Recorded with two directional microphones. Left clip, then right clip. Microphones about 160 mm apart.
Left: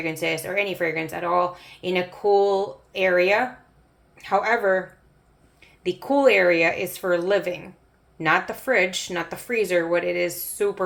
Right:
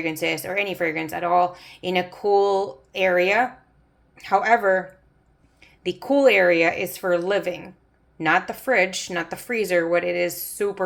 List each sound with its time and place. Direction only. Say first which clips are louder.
0.0 s speech: right 1 dB; 30° right (ahead or behind)